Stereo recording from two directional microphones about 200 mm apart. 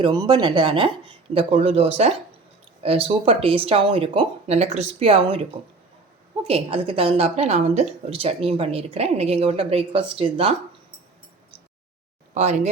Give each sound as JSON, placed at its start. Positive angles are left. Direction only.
{"t": 0.0, "sound": "speech", "side_deg": -20}
{"t": 6.5, "sound": "a woman's voice", "side_deg": -25}
{"t": 12.3, "sound": "a woman's voice", "side_deg": -35}